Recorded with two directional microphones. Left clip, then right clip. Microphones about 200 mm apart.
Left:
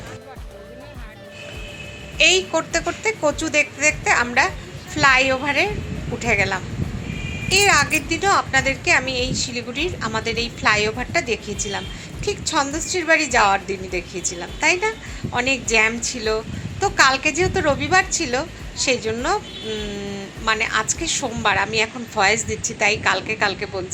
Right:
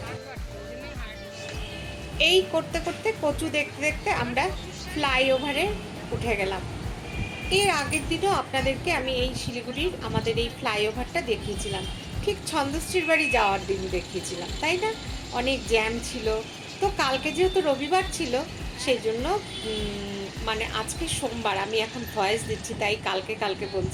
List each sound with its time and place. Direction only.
2.1 s a woman's voice: 15° left (ahead or behind)
20.4 s a woman's voice: 20° left (ahead or behind)